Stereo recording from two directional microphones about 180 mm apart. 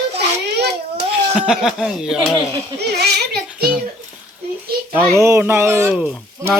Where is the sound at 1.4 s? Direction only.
5° right (ahead or behind).